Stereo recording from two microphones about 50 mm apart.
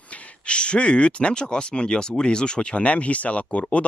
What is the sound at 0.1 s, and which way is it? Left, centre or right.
Speech, left.